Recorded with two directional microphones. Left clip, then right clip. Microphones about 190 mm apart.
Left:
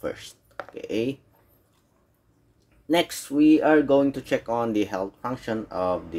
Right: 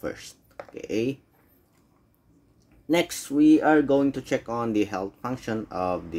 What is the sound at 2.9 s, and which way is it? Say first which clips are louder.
Speech: left 1 dB; 15° right (ahead or behind).